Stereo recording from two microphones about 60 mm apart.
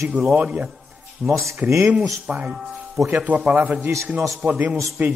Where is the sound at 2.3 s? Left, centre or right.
Right.